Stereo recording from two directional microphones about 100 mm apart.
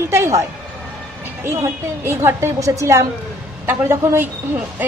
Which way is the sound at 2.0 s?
25° right (ahead or behind).